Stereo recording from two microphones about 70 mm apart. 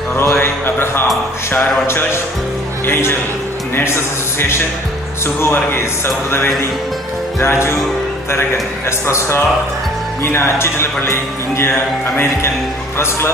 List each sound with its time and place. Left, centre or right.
0.1 s a sound: left
1.5 s speech: left
9.0 s speech: left